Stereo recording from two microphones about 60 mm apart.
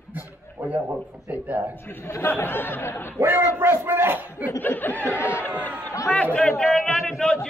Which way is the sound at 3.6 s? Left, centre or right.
Right.